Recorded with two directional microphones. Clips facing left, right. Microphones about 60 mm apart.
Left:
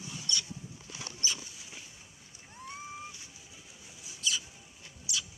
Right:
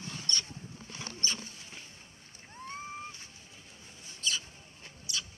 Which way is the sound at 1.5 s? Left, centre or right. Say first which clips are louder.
Even; centre.